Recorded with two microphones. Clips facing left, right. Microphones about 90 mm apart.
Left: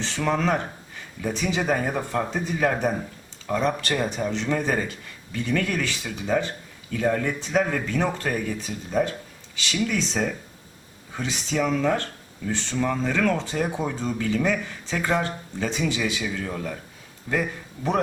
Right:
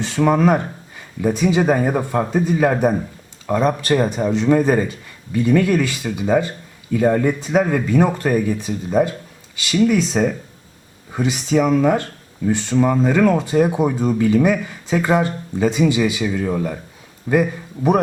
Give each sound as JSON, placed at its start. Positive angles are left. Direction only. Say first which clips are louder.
{"t": 0.0, "sound": "speech", "louder": "right 8 dB", "side_deg": -15}